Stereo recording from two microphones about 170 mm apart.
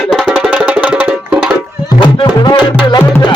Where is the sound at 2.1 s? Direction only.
25° left (ahead or behind).